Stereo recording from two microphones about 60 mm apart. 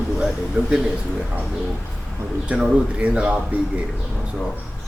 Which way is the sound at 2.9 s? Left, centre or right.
Right.